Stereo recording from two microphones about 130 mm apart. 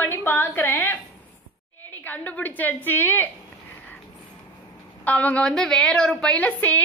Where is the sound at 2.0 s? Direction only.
10° left (ahead or behind).